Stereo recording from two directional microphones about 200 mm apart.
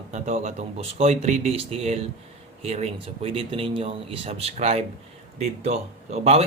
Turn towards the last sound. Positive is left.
turn(degrees=-30)  # may be behind; listen again after turning